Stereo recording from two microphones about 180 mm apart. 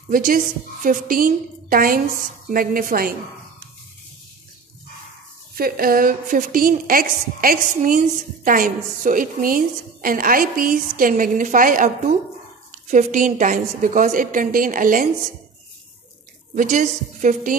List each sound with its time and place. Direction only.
0.1 s a woman's voice: 50° right (ahead or behind)
5.5 s a woman's voice: 55° right (ahead or behind)
16.5 s a woman's voice: 45° right (ahead or behind)